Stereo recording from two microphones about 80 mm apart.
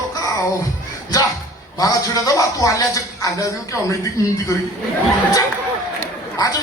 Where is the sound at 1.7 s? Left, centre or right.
Left.